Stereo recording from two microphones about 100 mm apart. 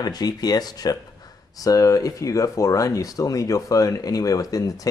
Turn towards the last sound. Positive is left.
turn(degrees=35)  # may be behind; listen again after turning